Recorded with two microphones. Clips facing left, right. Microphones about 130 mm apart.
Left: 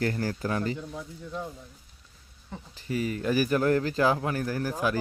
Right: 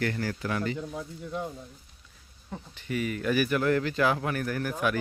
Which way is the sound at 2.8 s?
30° left (ahead or behind).